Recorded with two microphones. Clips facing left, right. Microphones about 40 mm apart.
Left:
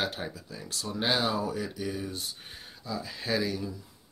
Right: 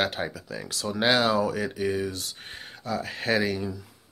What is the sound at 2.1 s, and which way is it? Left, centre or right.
Speech, right.